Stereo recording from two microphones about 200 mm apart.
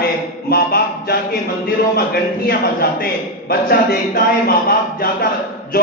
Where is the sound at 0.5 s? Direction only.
50° left (ahead or behind).